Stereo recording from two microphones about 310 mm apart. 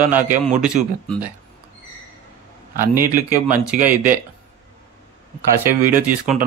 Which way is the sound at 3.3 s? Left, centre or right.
Centre.